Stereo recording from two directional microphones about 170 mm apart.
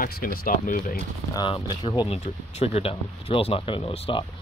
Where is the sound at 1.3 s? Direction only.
25° left (ahead or behind).